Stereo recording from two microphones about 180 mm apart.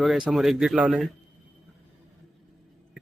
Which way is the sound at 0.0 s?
Centre (ahead or behind).